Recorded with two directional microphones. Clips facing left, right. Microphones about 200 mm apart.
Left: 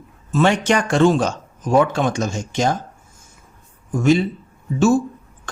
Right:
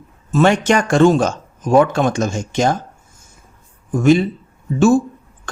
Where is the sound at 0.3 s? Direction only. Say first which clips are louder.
Right 3 dB; 45° right (ahead or behind).